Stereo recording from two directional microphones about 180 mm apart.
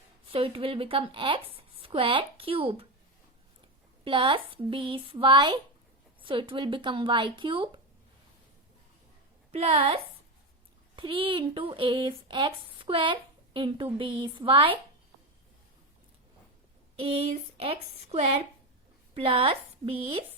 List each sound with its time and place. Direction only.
0.3 s a woman's voice: 30° right (ahead or behind)
4.0 s speech: 25° right (ahead or behind)
9.5 s a woman's voice: 35° right (ahead or behind)
17.0 s a woman's voice: 30° right (ahead or behind)